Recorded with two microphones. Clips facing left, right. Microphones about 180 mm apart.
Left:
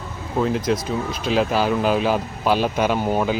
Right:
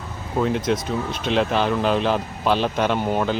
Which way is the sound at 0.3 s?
Centre (ahead or behind).